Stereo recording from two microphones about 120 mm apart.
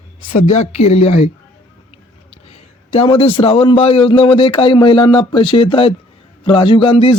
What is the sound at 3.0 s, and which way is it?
A man's voice, 50° left (ahead or behind).